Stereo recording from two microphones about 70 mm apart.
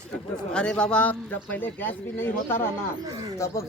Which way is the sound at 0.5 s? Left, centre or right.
Centre.